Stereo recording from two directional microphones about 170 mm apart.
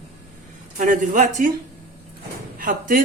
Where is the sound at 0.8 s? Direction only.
45° right (ahead or behind).